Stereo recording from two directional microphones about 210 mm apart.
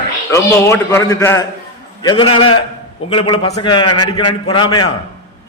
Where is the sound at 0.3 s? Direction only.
15° left (ahead or behind).